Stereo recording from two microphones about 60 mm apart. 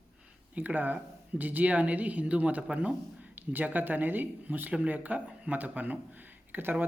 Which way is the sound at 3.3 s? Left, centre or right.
Right.